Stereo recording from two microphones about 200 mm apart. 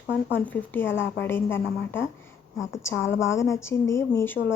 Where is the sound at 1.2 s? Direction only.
10° left (ahead or behind).